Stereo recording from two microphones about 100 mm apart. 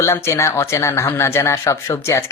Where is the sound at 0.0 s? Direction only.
30° left (ahead or behind).